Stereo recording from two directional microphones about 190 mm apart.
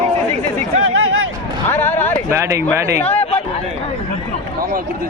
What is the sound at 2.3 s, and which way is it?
Speech, 15° right (ahead or behind).